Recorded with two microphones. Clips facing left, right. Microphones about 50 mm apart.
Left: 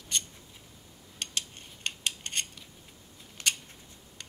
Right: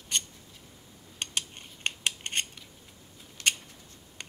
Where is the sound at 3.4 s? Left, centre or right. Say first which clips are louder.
Right 3 dB; left.